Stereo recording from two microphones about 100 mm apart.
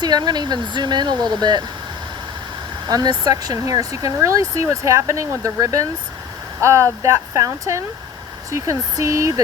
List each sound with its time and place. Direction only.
0.0 s speech: 45° right (ahead or behind)
2.8 s speech: 40° right (ahead or behind)